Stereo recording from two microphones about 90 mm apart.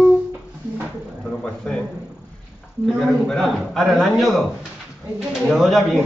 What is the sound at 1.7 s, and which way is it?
Speech, 10° left (ahead or behind).